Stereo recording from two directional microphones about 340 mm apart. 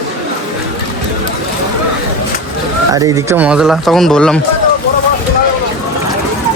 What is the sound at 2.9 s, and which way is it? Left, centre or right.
Speech, centre.